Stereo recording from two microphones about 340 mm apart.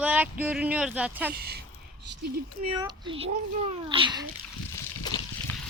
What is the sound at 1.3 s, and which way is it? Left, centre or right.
Speech, right.